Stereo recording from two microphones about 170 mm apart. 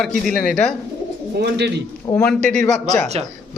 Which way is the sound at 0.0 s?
Centre (ahead or behind).